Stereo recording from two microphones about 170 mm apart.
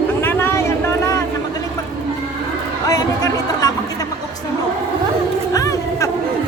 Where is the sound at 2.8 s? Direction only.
20° left (ahead or behind).